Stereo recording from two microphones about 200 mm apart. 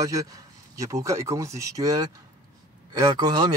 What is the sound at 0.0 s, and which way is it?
Speech, 15° right (ahead or behind).